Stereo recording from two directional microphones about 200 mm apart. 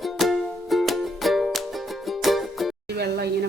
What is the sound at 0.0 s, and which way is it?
Music, centre (ahead or behind).